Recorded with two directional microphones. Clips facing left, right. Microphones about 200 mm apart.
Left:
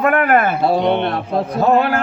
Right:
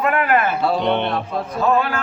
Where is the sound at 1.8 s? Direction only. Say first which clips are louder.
Left 5 dB; 65° left (ahead or behind).